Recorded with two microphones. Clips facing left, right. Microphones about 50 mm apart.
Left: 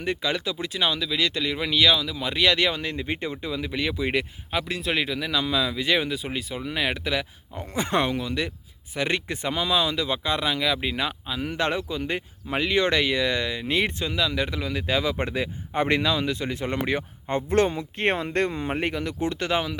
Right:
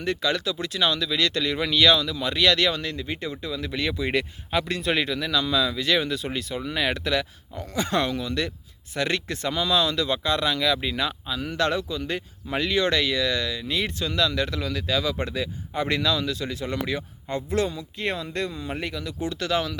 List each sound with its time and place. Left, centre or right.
0.0 s speech: centre
7.5 s speech: left
14.1 s speech: centre
14.8 s speech: left